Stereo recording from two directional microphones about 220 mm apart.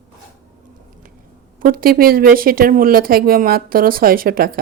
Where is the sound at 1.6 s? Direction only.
40° right (ahead or behind).